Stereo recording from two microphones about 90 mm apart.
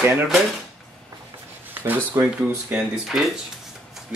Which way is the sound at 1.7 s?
25° right (ahead or behind).